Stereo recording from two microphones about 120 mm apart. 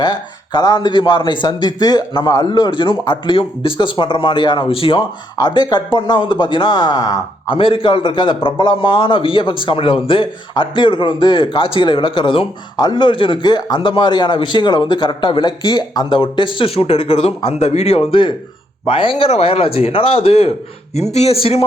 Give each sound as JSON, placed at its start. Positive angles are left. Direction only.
{"t": 0.0, "sound": "speech", "side_deg": 40}
{"t": 5.4, "sound": "speech", "side_deg": 35}
{"t": 7.5, "sound": "a man's voice", "side_deg": 45}
{"t": 19.3, "sound": "speech", "side_deg": 55}